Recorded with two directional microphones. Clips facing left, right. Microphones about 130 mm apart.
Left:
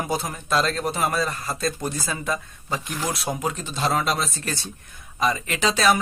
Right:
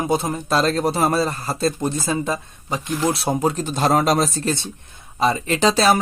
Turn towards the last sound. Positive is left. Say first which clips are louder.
# right 4 dB
turn(degrees=-35)  # may be behind; listen again after turning